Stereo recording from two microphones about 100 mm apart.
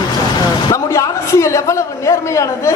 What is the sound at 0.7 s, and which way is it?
A man's voice, 30° left (ahead or behind).